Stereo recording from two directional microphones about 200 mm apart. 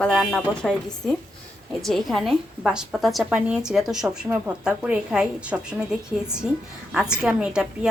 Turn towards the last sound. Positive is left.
turn(degrees=-5)  # may be behind; listen again after turning